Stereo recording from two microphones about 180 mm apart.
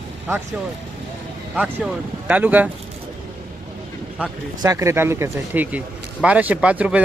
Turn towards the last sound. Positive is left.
turn(degrees=-5)  # may be behind; listen again after turning